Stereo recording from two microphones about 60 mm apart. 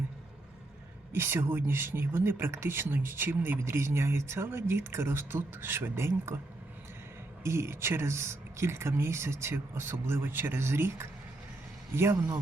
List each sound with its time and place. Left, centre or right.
1.1 s speech: right
7.4 s speech: right